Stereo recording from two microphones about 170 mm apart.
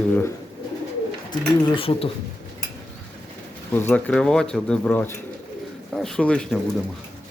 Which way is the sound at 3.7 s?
10° left (ahead or behind).